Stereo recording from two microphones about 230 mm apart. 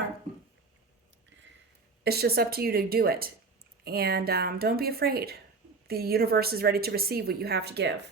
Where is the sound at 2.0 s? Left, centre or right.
Right.